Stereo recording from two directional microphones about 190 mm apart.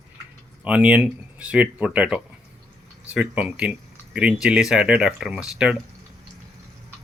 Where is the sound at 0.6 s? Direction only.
5° right (ahead or behind).